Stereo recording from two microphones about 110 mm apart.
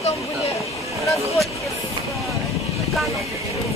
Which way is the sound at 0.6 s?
30° left (ahead or behind).